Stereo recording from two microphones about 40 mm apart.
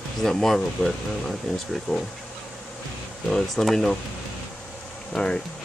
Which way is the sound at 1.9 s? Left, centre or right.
Left.